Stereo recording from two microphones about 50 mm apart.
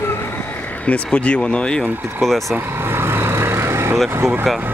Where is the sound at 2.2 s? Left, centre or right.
Centre.